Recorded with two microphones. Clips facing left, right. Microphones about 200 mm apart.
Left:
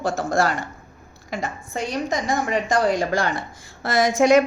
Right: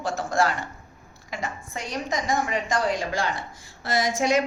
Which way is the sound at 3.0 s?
60° left (ahead or behind).